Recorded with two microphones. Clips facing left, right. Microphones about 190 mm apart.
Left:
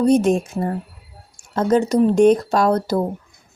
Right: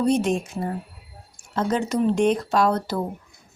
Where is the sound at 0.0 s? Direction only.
45° left (ahead or behind).